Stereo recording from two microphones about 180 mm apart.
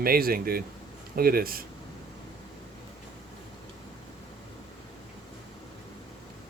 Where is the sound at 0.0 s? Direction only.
55° right (ahead or behind).